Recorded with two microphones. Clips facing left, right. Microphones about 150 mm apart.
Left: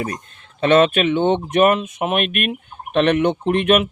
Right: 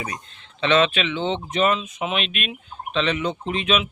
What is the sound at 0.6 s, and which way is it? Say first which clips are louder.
Speech: left 5 dB; 50° left (ahead or behind).